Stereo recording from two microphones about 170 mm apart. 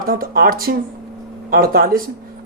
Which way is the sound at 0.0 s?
55° right (ahead or behind).